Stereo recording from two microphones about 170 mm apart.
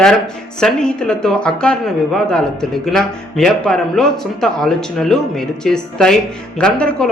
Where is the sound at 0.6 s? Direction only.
5° left (ahead or behind).